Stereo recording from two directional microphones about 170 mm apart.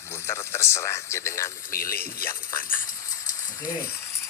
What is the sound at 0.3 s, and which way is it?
A man's voice, 15° left (ahead or behind).